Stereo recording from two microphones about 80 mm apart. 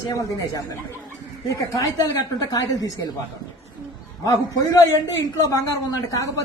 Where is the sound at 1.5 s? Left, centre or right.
Left.